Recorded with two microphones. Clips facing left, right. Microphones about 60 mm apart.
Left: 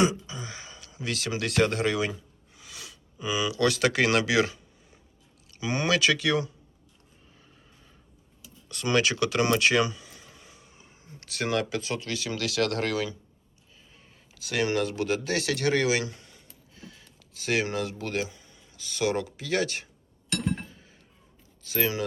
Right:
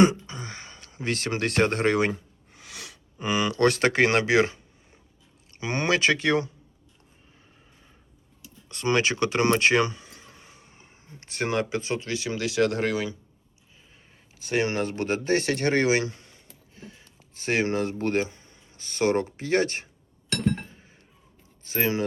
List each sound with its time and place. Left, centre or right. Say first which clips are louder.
0.0 s a sound: right 5 dB; right
5.5 s speech: right 1 dB; right
8.7 s speech: right 1 dB; right
14.4 s speech: right 1 dB; right
20.7 s chink: right 1 dB; right
21.6 s speech: right 2 dB; right